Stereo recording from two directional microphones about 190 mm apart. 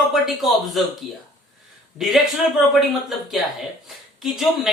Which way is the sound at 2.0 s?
Centre (ahead or behind).